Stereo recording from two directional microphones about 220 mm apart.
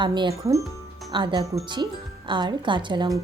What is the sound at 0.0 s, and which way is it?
Speech, 20° right (ahead or behind).